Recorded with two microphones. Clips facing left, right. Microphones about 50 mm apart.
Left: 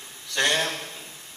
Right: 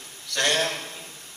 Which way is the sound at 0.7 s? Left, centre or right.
Centre.